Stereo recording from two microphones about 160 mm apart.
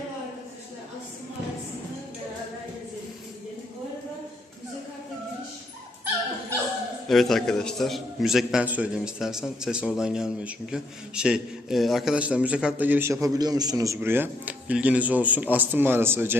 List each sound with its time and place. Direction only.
7.1 s a man's voice: centre (ahead or behind)
13.2 s a man's voice: 25° right (ahead or behind)